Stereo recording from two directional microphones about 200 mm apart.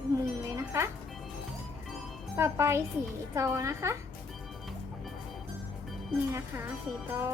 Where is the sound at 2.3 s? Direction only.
15° right (ahead or behind).